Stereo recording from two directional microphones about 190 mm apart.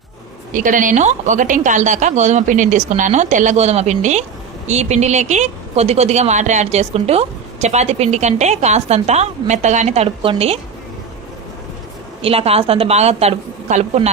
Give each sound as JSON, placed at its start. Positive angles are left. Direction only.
{"t": 0.5, "sound": "a woman's voice", "side_deg": -45}
{"t": 12.2, "sound": "a woman's voice", "side_deg": -30}